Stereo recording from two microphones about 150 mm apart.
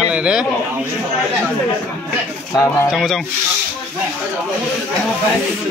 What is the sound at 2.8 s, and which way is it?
Speech, centre (ahead or behind).